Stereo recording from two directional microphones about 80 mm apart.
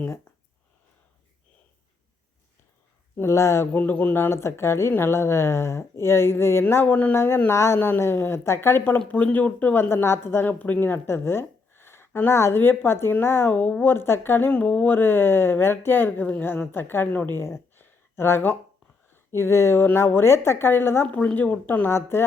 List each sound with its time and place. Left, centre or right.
3.2 s speech: left
3.7 s speech: centre
14.5 s speech: centre
21.8 s speech: left